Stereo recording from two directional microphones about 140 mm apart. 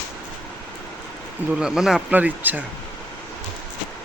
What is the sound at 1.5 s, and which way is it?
Speech, 5° right (ahead or behind).